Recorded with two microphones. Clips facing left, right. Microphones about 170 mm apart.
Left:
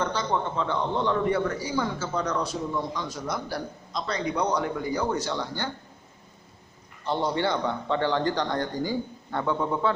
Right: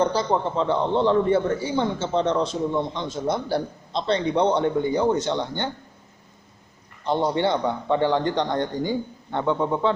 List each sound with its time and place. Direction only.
0.0 s a man's voice: 35° right (ahead or behind)
7.0 s a man's voice: 20° right (ahead or behind)